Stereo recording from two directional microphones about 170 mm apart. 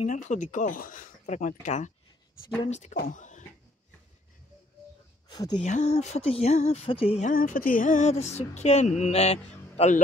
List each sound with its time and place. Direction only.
0.0 s speech: 45° left (ahead or behind)
3.1 s a sound: 45° left (ahead or behind)
5.3 s speech: 25° left (ahead or behind)
5.6 s speech: 40° left (ahead or behind)